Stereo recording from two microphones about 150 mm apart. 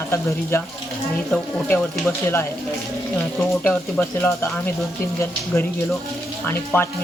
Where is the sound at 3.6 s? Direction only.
15° left (ahead or behind).